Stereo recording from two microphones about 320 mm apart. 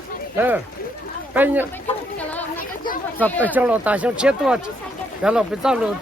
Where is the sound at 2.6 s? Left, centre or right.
Left.